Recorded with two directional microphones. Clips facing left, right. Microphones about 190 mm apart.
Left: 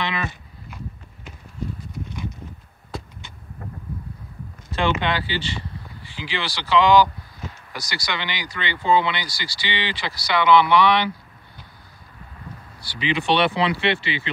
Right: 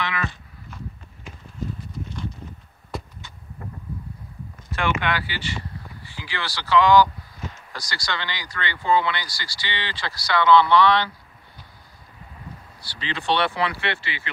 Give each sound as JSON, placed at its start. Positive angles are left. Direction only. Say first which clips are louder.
{"t": 0.0, "sound": "a sound", "louder": "left 1 dB", "side_deg": 20}
{"t": 4.7, "sound": "speech", "louder": "left 2 dB", "side_deg": 25}
{"t": 12.9, "sound": "speech", "louder": "left 4 dB", "side_deg": 15}